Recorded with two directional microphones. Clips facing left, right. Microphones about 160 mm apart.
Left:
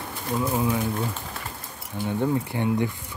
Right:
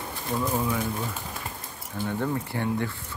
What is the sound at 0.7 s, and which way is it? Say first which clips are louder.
Speech: left 3 dB; 20° left (ahead or behind).